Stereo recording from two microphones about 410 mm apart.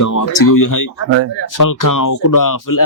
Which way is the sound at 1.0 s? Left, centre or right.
Right.